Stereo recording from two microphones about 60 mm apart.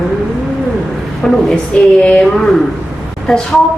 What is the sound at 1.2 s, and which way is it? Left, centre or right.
Speech, centre.